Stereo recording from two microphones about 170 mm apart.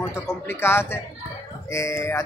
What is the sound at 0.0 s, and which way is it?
Speech, 15° left (ahead or behind).